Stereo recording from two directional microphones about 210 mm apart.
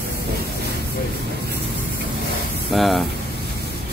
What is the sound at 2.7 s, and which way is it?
Speech, centre (ahead or behind).